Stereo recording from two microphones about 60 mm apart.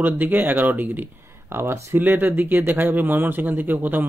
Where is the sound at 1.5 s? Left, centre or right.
Right.